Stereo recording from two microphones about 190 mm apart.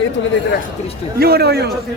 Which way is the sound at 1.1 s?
55° right (ahead or behind).